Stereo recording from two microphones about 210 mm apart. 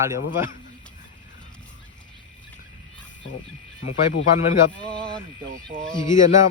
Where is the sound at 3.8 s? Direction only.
65° left (ahead or behind).